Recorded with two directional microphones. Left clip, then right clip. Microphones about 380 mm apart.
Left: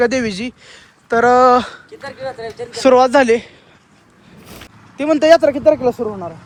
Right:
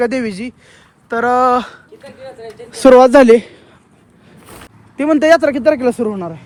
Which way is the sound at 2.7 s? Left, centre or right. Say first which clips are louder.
Right 4 dB; centre.